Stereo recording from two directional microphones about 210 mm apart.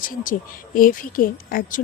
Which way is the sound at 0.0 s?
40° left (ahead or behind).